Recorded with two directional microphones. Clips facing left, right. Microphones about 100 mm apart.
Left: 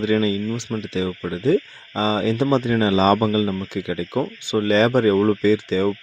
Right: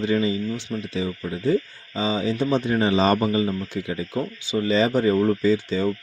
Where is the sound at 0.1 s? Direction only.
90° left.